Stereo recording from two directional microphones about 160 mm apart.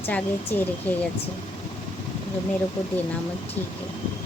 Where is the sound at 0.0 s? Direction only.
10° left (ahead or behind).